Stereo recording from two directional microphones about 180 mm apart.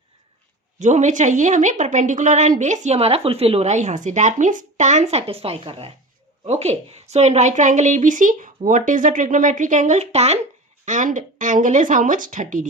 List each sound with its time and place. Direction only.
0.8 s a woman's voice: 40° right (ahead or behind)